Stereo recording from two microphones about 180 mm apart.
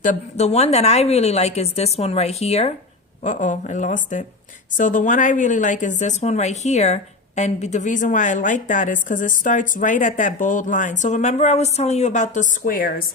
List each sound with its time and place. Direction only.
0.0 s a woman's voice: 40° left (ahead or behind)